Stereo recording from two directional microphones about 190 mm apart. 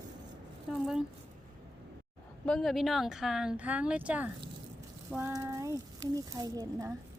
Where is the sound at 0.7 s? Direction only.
5° right (ahead or behind).